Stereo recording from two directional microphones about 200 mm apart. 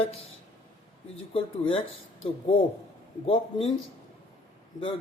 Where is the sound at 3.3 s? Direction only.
30° left (ahead or behind).